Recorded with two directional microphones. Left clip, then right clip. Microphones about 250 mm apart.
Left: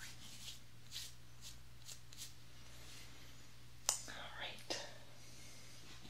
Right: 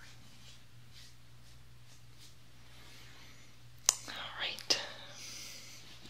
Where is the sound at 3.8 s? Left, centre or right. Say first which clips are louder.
Right 9 dB; centre.